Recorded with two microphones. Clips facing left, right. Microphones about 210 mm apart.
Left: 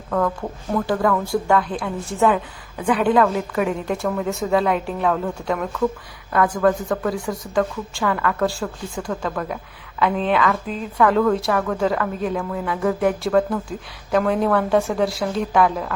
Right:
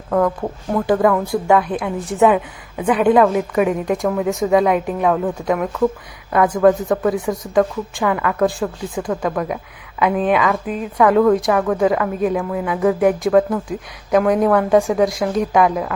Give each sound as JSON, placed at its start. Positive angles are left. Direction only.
{"t": 0.9, "sound": "a woman's voice", "side_deg": -20}